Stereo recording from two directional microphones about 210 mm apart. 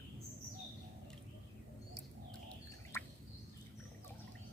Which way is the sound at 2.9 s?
10° left (ahead or behind).